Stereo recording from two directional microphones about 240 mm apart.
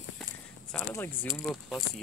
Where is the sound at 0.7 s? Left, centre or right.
Centre.